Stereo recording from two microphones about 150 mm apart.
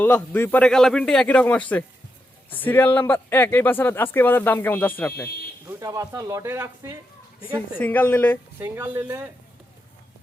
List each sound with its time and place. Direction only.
0.0 s speech: 10° left (ahead or behind)
5.6 s speech: 20° right (ahead or behind)
7.8 s speech: 10° left (ahead or behind)
8.5 s speech: 15° right (ahead or behind)